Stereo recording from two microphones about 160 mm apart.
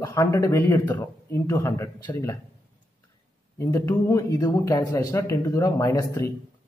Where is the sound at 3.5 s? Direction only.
15° left (ahead or behind).